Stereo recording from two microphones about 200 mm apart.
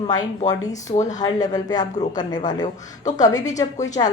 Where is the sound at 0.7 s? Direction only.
35° left (ahead or behind).